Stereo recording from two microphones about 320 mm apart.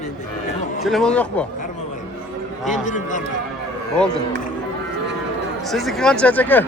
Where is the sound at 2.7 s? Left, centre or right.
Left.